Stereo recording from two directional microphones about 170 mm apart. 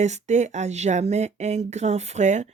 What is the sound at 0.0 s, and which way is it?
Speech, 45° right (ahead or behind).